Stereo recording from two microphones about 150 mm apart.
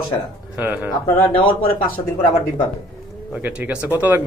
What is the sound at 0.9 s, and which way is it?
Speech, 15° left (ahead or behind).